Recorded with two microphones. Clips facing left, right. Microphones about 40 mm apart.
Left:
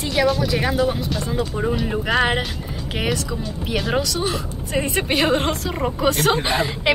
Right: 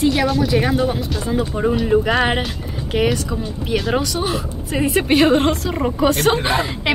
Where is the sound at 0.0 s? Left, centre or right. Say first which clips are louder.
Right 3 dB; centre.